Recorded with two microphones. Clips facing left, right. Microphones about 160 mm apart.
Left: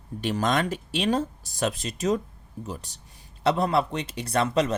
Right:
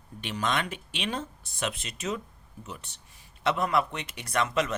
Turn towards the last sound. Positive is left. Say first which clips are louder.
# left 4 dB
turn(degrees=35)  # may be behind; listen again after turning